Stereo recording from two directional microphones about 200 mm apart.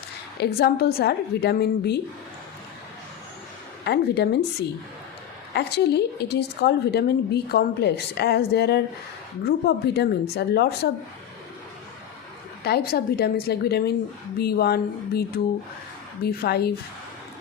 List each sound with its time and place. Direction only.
0.3 s a woman's voice: 55° left (ahead or behind)
3.8 s a woman's voice: 55° left (ahead or behind)
5.5 s a woman's voice: 55° left (ahead or behind)
12.6 s a woman's voice: 50° left (ahead or behind)